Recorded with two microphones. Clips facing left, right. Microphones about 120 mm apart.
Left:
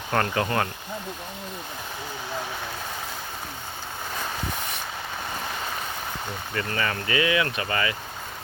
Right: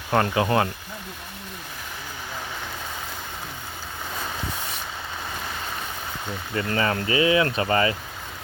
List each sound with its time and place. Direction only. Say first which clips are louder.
0.1 s speech: right 4 dB; 20° right (ahead or behind)
6.7 s speech: right 5 dB; 30° right (ahead or behind)